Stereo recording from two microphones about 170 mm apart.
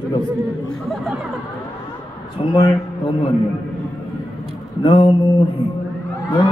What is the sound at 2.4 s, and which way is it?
Speech, 30° left (ahead or behind).